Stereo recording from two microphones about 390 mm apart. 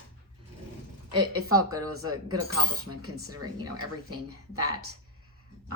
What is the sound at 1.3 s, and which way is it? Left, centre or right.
Speech, right.